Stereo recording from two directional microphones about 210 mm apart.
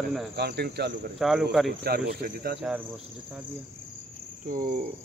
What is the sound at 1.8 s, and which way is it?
Speech, 50° right (ahead or behind).